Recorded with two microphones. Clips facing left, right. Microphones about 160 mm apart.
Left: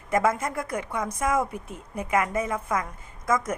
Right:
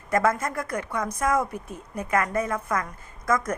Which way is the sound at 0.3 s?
25° left (ahead or behind).